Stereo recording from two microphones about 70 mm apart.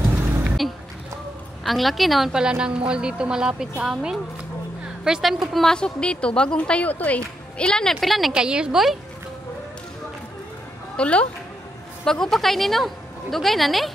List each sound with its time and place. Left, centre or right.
1.6 s a woman's voice: centre
8.3 s a woman's voice: centre
11.0 s a woman's voice: centre
12.0 s a woman's voice: centre